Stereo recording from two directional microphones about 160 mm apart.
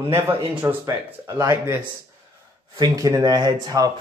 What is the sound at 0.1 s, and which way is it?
Speech, 15° right (ahead or behind).